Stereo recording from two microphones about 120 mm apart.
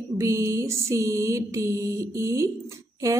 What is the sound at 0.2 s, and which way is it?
A woman's voice, 25° right (ahead or behind).